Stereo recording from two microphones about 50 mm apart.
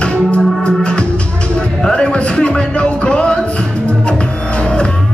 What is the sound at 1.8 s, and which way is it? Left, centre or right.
Music, centre.